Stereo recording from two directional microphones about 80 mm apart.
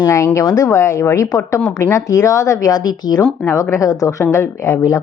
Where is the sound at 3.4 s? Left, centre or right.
Left.